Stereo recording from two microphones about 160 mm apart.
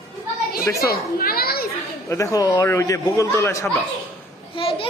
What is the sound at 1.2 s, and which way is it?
Speech, 70° left (ahead or behind).